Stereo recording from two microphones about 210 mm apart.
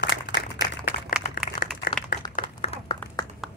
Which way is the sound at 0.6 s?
40° left (ahead or behind).